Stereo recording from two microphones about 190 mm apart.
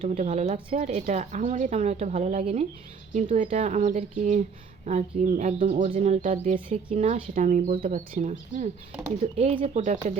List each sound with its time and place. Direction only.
0.0 s speech: 35° right (ahead or behind)